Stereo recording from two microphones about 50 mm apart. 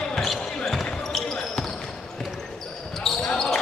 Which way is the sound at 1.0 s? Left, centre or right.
Centre.